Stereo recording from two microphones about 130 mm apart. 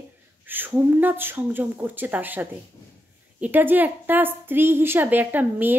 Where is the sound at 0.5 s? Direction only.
15° right (ahead or behind).